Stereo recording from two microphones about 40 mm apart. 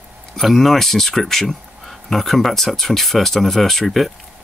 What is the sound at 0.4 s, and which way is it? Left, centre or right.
Speech, centre.